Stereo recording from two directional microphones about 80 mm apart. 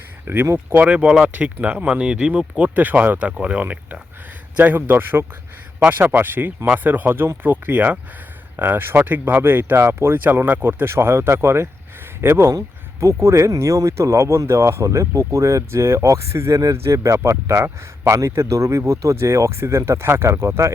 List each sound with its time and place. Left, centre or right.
0.3 s speech: right
0.9 s speech: centre; by 20.7 s right